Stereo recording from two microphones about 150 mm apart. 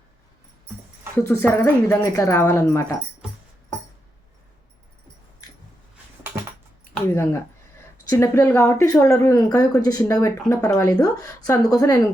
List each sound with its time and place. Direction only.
1.1 s speech: 15° left (ahead or behind)
6.9 s speech: 15° left (ahead or behind)